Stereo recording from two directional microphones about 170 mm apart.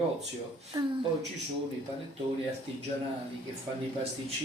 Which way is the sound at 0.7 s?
25° right (ahead or behind).